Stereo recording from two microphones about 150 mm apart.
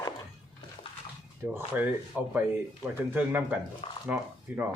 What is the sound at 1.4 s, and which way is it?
Speech, 15° right (ahead or behind).